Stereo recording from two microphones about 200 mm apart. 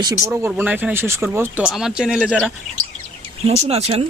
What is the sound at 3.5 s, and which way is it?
Speech, 30° right (ahead or behind).